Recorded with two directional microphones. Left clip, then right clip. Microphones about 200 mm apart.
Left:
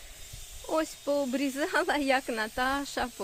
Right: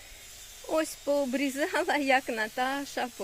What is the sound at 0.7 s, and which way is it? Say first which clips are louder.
Speech: right 1 dB; 5° left (ahead or behind).